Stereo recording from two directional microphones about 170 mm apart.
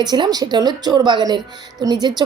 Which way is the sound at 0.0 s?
25° right (ahead or behind).